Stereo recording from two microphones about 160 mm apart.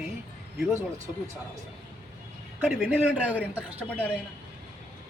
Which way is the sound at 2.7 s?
5° right (ahead or behind).